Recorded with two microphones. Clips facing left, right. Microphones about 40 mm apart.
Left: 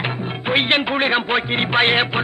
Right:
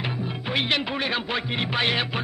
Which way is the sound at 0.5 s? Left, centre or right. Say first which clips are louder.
Left 8 dB; left.